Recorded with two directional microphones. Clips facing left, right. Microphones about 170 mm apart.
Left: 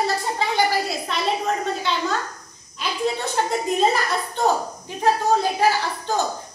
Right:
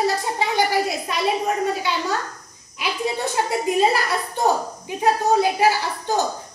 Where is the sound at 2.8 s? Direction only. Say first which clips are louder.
Even; 10° right (ahead or behind).